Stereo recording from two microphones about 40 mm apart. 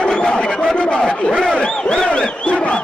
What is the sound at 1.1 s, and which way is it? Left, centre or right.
Battle cry, left.